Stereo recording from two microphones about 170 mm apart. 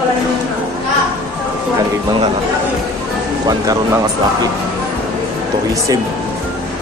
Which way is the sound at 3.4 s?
20° right (ahead or behind).